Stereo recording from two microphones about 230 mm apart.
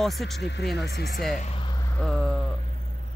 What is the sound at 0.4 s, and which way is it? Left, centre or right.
Speech, left.